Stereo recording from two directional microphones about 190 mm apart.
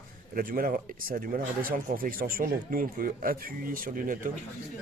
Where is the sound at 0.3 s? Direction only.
50° right (ahead or behind).